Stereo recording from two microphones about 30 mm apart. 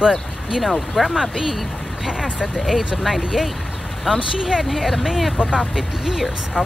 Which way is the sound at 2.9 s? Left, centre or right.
Centre.